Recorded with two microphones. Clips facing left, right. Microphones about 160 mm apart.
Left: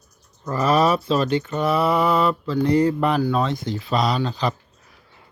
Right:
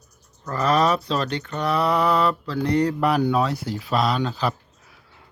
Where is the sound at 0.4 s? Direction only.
5° left (ahead or behind).